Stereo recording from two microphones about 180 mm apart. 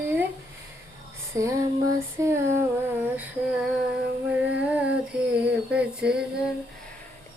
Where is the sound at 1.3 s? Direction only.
15° right (ahead or behind).